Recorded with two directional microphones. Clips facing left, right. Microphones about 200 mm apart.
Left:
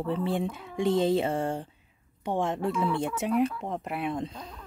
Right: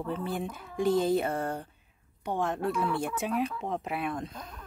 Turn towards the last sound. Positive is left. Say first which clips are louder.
# left 3 dB
turn(degrees=30)  # may be behind; listen again after turning